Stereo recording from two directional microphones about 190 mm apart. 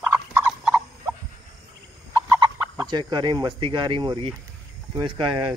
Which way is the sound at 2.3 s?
15° right (ahead or behind).